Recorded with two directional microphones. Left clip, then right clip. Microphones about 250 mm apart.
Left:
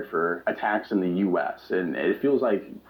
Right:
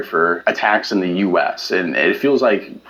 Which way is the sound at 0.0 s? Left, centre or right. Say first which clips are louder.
Right 10 dB; right.